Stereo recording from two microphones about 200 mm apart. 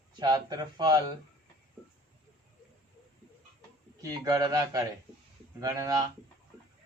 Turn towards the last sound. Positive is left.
turn(degrees=-15)  # may be behind; listen again after turning